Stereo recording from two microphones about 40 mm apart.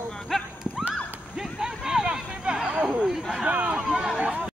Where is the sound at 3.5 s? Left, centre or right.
Right.